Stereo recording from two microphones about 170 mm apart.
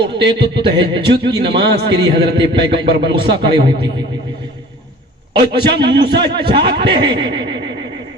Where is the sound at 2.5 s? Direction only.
30° right (ahead or behind).